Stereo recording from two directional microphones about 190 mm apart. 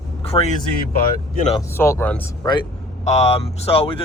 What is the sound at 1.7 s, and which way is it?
Speech, 10° left (ahead or behind).